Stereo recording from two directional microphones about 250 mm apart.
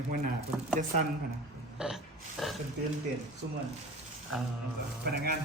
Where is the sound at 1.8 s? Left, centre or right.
Centre.